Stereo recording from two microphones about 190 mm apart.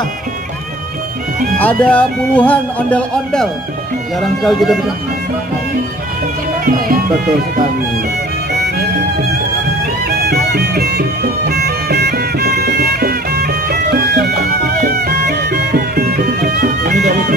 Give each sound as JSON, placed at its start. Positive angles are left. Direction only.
{"t": 1.6, "sound": "speech", "side_deg": 10}
{"t": 10.0, "sound": "music", "side_deg": -55}